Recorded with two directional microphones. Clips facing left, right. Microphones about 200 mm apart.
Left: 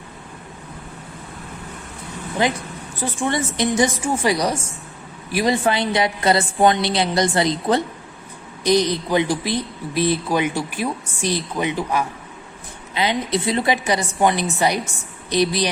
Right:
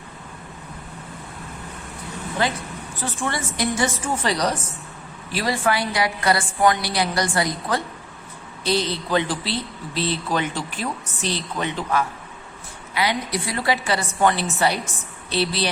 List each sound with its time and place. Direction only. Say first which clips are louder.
2.4 s a woman's voice: left 4 dB; 15° left (ahead or behind)